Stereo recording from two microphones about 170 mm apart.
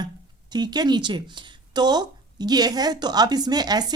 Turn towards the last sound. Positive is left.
turn(degrees=-25)  # may be behind; listen again after turning